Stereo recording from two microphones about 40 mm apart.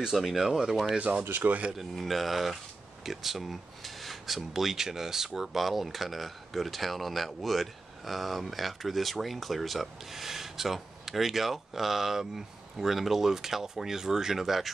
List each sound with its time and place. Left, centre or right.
0.2 s speech: centre
0.9 s speech: right
1.4 s speech: right
2.0 s speech: centre